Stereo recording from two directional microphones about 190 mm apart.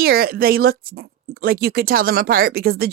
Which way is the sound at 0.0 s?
55° right (ahead or behind).